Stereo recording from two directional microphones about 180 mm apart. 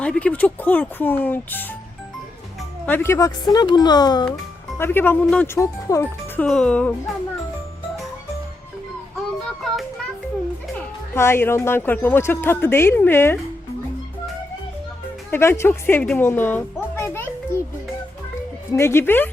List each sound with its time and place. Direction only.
0.0 s speech: 5° left (ahead or behind)
2.8 s speech: 10° left (ahead or behind)
4.8 s speech: 10° left (ahead or behind)
10.8 s speech: 15° left (ahead or behind)
15.3 s speech: 15° left (ahead or behind)
18.7 s speech: 15° left (ahead or behind)